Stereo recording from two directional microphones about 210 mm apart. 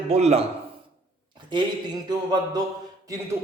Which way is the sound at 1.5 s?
20° right (ahead or behind).